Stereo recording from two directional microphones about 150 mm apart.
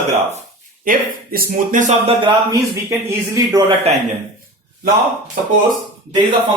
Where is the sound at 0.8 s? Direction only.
75° right (ahead or behind); by 1.9 s 60° right (ahead or behind).